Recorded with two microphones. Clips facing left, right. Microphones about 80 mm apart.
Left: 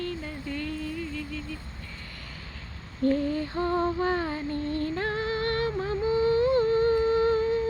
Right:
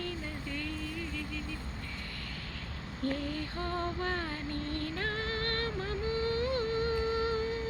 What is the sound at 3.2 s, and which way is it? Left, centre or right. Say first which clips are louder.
Music: left 9 dB; left.